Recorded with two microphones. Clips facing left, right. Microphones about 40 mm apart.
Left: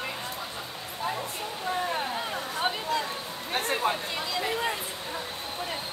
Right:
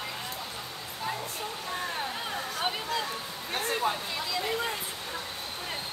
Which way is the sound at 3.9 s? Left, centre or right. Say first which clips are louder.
Left 2 dB; left.